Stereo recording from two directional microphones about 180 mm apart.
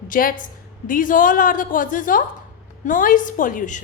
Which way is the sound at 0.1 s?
50° left (ahead or behind).